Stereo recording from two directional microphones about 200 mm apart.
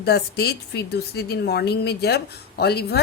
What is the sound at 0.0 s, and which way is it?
A woman's voice, 55° left (ahead or behind).